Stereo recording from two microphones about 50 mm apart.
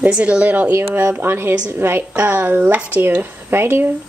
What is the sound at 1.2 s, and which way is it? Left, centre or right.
A woman's voice, right.